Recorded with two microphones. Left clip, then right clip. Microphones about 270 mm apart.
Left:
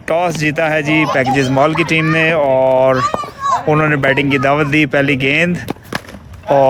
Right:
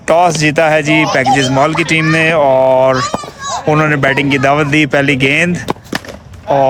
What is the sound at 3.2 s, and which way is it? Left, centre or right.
Children playing, right.